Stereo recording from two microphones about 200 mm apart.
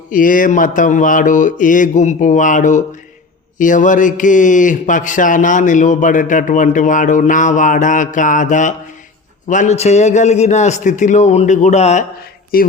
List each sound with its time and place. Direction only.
0.1 s speech: 40° left (ahead or behind)
12.5 s speech: 45° left (ahead or behind)